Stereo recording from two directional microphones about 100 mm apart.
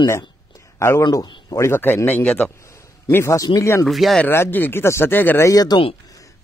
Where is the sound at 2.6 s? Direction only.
30° left (ahead or behind).